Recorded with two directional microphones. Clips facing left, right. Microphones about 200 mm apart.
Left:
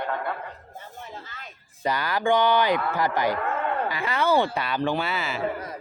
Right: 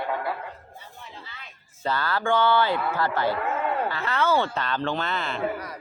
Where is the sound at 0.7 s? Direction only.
45° left (ahead or behind).